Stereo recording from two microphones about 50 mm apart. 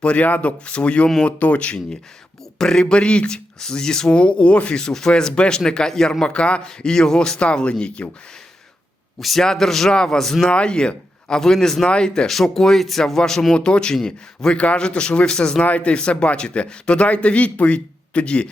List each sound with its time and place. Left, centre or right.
0.0 s a man's voice: left
2.6 s speech: centre
9.4 s a man's voice: centre
15.6 s a man's voice: left